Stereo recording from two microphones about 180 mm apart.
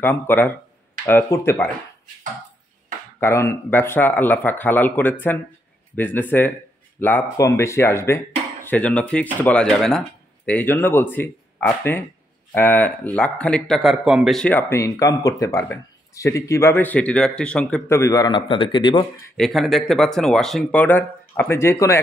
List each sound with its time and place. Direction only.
0.0 s speech: 10° left (ahead or behind)
3.2 s speech: 15° left (ahead or behind)
19.3 s speech: centre (ahead or behind)